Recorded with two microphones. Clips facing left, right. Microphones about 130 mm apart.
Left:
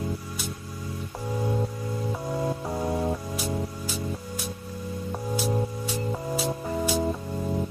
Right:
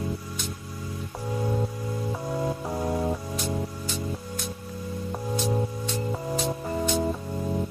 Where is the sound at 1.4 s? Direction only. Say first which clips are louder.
Even; centre (ahead or behind).